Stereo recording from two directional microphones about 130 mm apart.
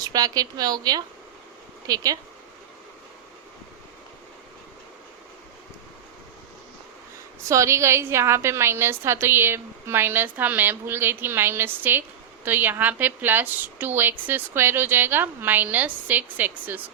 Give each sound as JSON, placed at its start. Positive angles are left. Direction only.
{"t": 0.0, "sound": "a woman's voice", "side_deg": -30}
{"t": 7.4, "sound": "a woman's voice", "side_deg": -20}